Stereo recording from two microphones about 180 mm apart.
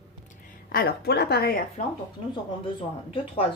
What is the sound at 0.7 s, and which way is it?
Speech, 60° left (ahead or behind).